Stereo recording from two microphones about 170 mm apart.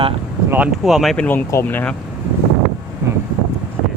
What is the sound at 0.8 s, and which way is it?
Speech, centre (ahead or behind).